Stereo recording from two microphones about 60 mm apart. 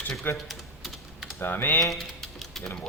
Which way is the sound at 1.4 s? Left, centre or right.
Left.